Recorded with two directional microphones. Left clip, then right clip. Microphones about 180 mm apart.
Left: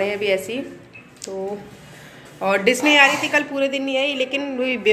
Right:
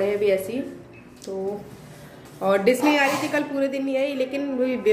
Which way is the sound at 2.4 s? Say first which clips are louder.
Left 2 dB; centre (ahead or behind).